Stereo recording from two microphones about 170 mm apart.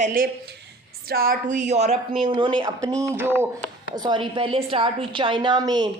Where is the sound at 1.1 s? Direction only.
60° right (ahead or behind); by 1.9 s 40° right (ahead or behind).